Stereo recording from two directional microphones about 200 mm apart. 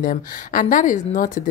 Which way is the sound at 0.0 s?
45° left (ahead or behind).